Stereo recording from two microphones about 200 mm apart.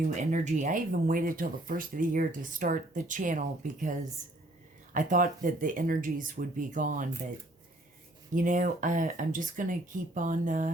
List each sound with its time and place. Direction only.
0.2 s speech: 35° right (ahead or behind)
4.9 s speech: 40° right (ahead or behind)
8.4 s speech: 40° right (ahead or behind)